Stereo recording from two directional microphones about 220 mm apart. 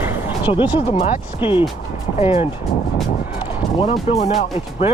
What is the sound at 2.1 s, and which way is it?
Speech, 30° left (ahead or behind).